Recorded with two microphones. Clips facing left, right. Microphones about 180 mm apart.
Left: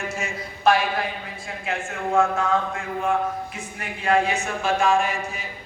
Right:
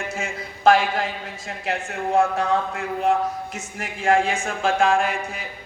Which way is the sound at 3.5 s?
90° right.